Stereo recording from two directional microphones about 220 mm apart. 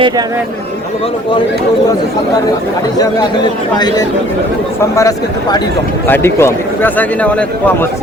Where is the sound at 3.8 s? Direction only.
20° left (ahead or behind).